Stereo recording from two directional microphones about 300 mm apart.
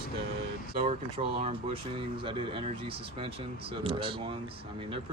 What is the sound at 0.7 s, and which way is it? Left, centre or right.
Speech, centre.